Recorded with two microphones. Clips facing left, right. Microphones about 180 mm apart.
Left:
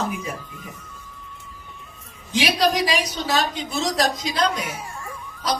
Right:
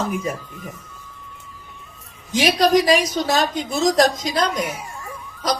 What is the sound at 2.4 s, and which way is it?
A woman's voice, 45° right (ahead or behind).